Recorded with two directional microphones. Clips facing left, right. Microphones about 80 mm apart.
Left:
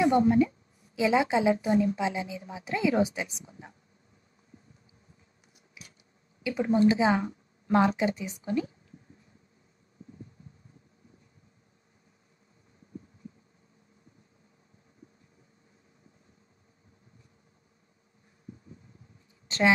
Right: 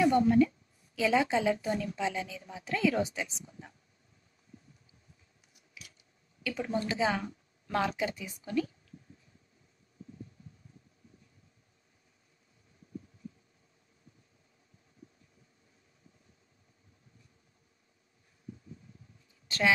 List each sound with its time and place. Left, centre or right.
0.0 s a woman's voice: left
5.8 s scissors: left
6.4 s a woman's voice: left
19.4 s a sound: left